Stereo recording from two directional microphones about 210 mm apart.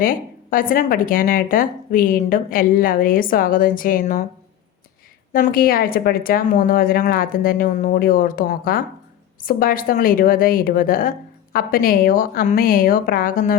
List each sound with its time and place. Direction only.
0.0 s speech: 40° left (ahead or behind)
5.3 s a woman's voice: 45° left (ahead or behind)